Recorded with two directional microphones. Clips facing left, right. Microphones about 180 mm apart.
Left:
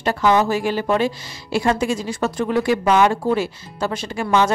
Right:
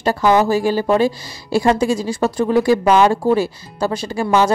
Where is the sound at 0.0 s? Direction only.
35° right (ahead or behind).